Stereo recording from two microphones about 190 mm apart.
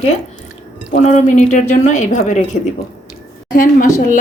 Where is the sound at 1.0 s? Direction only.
40° left (ahead or behind).